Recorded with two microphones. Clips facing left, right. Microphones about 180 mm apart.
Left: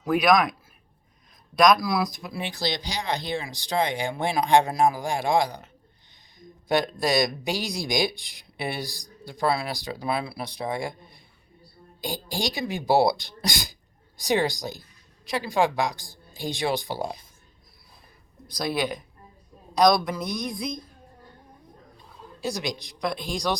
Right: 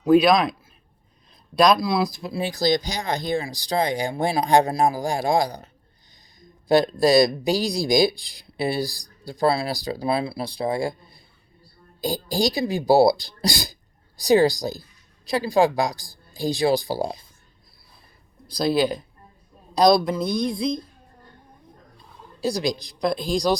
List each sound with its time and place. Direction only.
0.0 s speech: 30° right (ahead or behind)
1.5 s speech: 30° right (ahead or behind)
6.7 s speech: 35° right (ahead or behind)
18.4 s speech: 30° right (ahead or behind)
22.4 s speech: 35° right (ahead or behind)